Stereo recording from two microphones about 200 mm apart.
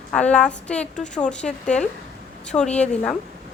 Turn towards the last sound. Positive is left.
turn(degrees=5)  # may be behind; listen again after turning